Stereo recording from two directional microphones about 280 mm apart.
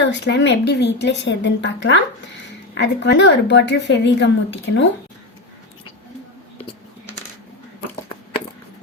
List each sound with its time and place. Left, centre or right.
0.0 s a woman's voice: left